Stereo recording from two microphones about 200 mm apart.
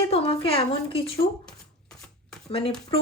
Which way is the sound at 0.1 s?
30° left (ahead or behind).